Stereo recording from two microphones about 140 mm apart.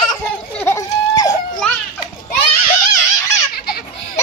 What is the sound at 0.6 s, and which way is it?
Goat, 20° left (ahead or behind).